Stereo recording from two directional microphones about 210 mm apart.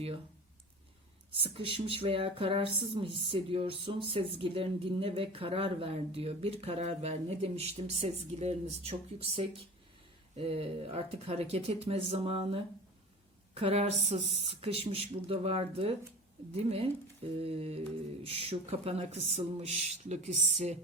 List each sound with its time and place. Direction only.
1.4 s speech: 25° right (ahead or behind)